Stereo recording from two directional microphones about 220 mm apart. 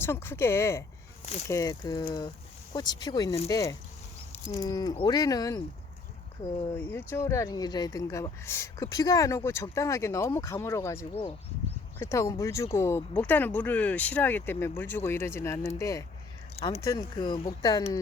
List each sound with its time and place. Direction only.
0.0 s speech: 10° left (ahead or behind)
1.2 s speech: 30° left (ahead or behind)
1.5 s speech: 15° left (ahead or behind)
6.7 s speech: 10° left (ahead or behind)
11.1 s speech: 25° left (ahead or behind)
11.9 s speech: 15° left (ahead or behind)
16.6 s speech: 25° left (ahead or behind)
16.8 s speech: 15° left (ahead or behind)